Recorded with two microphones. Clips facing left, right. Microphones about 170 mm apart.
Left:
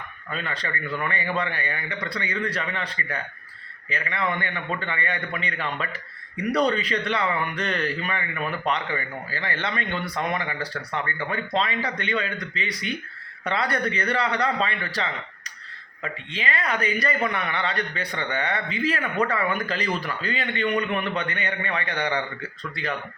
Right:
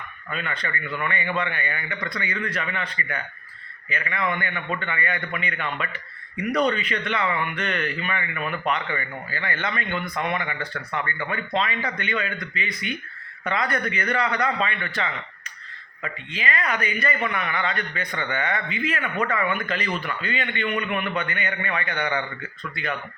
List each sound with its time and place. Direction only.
0.3 s a man's voice: 30° left (ahead or behind)
16.3 s a man's voice: 30° left (ahead or behind)